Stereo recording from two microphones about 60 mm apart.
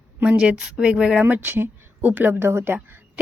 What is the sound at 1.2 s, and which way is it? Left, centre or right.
Speech, right.